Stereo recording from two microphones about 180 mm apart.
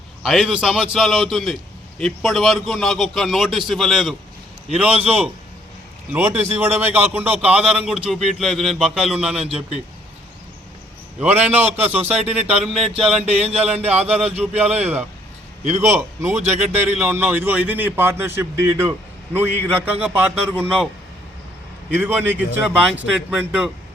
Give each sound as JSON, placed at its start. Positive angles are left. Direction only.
{"t": 0.2, "sound": "a man's voice", "side_deg": 0}
{"t": 11.2, "sound": "a man's voice", "side_deg": -10}
{"t": 12.1, "sound": "a man's voice", "side_deg": -35}
{"t": 12.5, "sound": "a man's voice", "side_deg": 0}
{"t": 13.6, "sound": "a man's voice", "side_deg": -35}
{"t": 13.9, "sound": "a man's voice", "side_deg": -5}
{"t": 21.9, "sound": "a man's voice", "side_deg": -10}